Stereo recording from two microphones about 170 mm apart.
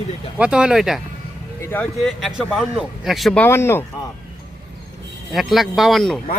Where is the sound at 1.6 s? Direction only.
10° left (ahead or behind).